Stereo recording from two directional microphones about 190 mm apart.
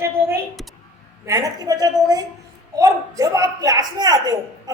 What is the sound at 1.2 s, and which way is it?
A woman's voice, 20° right (ahead or behind).